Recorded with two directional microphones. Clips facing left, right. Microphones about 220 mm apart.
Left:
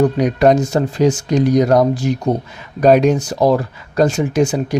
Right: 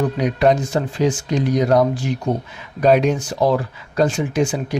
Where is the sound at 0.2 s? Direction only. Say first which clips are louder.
Left 4 dB; 45° left (ahead or behind).